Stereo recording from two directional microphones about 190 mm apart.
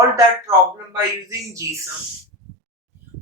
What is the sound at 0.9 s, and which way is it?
Speech, 15° right (ahead or behind).